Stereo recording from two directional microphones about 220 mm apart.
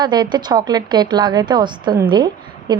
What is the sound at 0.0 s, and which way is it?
A woman's voice, 20° right (ahead or behind).